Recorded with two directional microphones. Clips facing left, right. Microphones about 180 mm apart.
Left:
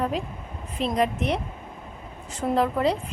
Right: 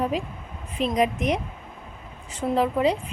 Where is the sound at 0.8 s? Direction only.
35° left (ahead or behind).